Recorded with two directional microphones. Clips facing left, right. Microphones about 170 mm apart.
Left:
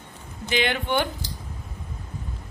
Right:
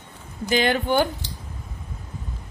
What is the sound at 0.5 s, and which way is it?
Speech, 40° right (ahead or behind).